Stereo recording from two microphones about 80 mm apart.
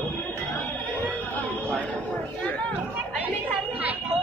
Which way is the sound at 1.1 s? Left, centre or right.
Centre.